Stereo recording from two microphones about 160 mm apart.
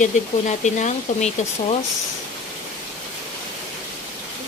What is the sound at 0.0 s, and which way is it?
Speech, 50° left (ahead or behind).